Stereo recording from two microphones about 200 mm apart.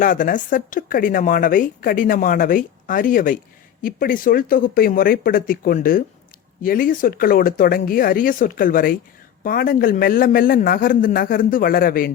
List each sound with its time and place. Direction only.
0.0 s speech: 40° left (ahead or behind)